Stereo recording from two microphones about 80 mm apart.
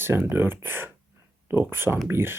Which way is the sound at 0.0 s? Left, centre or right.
Right.